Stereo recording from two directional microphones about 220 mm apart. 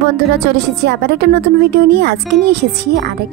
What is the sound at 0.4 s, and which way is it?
A woman's voice, 50° right (ahead or behind).